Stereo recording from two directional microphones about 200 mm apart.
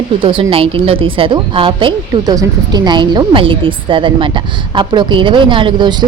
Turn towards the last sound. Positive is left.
turn(degrees=-25)  # may be behind; listen again after turning